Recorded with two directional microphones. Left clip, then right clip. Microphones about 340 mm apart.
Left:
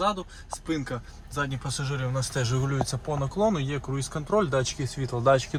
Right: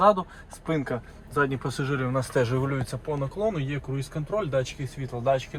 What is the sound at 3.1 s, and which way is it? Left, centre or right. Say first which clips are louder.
Speech: left 1 dB; left.